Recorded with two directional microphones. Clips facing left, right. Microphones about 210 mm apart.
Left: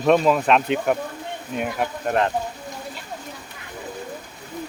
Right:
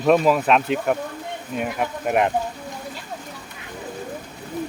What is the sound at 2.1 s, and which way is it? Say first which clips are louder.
Speech: right 2 dB; 15° right (ahead or behind).